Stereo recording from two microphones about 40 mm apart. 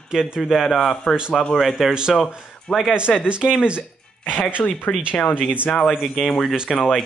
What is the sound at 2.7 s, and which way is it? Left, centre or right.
Speech, centre.